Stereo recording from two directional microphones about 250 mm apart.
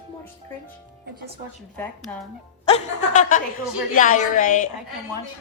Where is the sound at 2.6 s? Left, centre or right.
Left.